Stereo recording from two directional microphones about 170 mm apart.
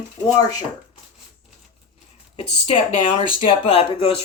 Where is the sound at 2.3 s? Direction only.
35° left (ahead or behind).